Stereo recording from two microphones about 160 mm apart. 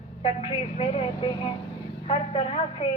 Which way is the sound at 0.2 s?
35° left (ahead or behind).